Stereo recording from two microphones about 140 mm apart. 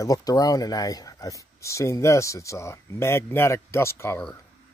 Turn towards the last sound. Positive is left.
turn(degrees=20)  # may be behind; listen again after turning